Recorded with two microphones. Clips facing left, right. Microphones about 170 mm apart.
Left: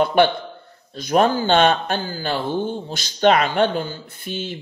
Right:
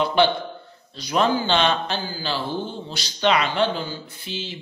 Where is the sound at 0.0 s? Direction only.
55° left (ahead or behind).